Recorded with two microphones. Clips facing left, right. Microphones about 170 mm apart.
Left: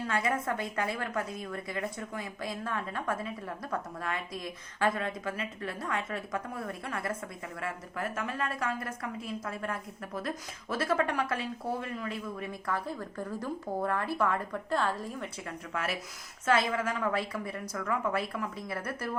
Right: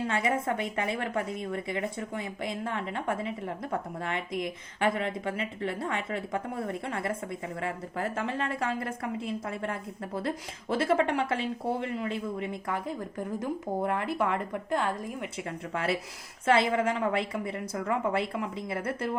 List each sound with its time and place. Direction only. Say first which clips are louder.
0.0 s a woman's voice: right 2 dB; 25° right (ahead or behind)